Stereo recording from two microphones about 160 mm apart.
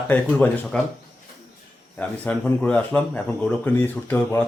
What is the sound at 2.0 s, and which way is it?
Speech, 10° left (ahead or behind).